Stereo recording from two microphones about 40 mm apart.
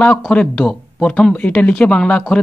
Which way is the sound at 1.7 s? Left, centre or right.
Left.